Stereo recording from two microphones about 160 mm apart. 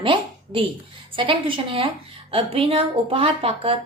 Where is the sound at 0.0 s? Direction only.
30° right (ahead or behind).